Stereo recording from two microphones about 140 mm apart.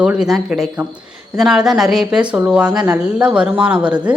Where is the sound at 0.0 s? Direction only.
5° right (ahead or behind).